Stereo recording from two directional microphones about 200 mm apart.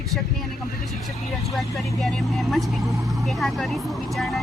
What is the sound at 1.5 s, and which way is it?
Speech, centre (ahead or behind).